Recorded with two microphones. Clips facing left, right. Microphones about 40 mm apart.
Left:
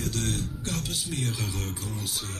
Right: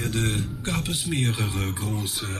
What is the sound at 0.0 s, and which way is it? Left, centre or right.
Speech, right.